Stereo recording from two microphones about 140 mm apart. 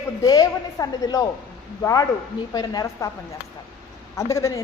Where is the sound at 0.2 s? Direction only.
25° left (ahead or behind).